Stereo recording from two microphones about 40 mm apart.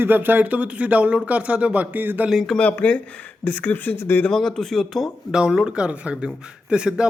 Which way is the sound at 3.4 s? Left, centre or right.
Left.